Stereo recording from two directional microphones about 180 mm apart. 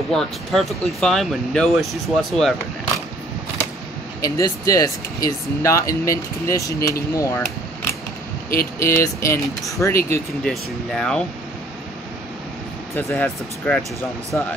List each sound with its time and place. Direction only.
0.1 s speech: centre (ahead or behind)
4.2 s speech: 20° left (ahead or behind)
10.4 s speech: centre (ahead or behind)
12.9 s speech: 10° left (ahead or behind)